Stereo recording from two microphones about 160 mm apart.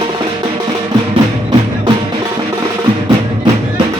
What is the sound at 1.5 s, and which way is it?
Music, 25° right (ahead or behind).